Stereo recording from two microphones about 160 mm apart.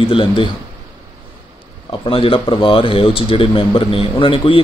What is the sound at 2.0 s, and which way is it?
Speech, 35° left (ahead or behind).